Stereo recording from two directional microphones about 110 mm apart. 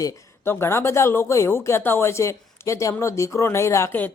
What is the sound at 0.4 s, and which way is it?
Speech, 20° left (ahead or behind).